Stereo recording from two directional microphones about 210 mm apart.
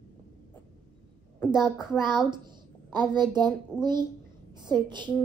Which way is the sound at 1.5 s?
5° right (ahead or behind).